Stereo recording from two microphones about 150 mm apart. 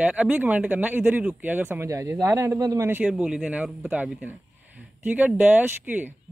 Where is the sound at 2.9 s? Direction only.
5° right (ahead or behind).